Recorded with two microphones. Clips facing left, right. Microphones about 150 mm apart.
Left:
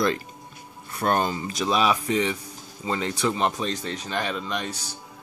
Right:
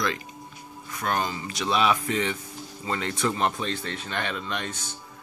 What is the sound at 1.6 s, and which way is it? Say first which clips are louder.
Speech: left 1 dB; 15° left (ahead or behind).